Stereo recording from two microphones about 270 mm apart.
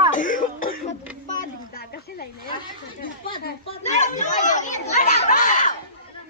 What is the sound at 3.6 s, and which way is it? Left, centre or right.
Speech, left.